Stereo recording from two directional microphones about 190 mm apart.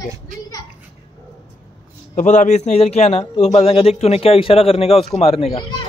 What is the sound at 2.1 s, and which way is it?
Speech, 40° left (ahead or behind).